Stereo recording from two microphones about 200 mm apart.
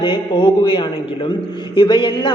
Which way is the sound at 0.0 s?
25° left (ahead or behind).